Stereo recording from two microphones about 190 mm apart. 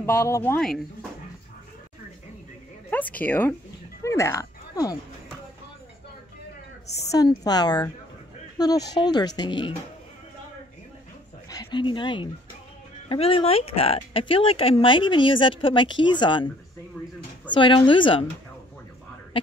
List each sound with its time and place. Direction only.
0.0 s speech: 15° left (ahead or behind)
2.9 s speech: 10° left (ahead or behind)
4.0 s a sound: 15° left (ahead or behind)
7.1 s speech: 20° left (ahead or behind)
11.4 s speech: 20° left (ahead or behind)
17.5 s speech: 25° left (ahead or behind)